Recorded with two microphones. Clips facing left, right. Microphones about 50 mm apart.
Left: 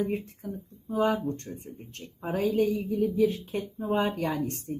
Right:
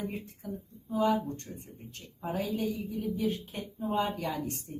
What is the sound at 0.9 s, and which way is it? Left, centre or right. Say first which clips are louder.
Speech: left 2 dB; left.